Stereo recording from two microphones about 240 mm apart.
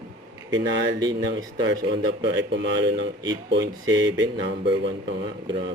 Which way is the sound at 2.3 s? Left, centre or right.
Right.